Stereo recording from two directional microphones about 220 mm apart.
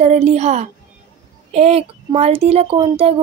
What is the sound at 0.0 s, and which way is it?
Speech, 30° right (ahead or behind).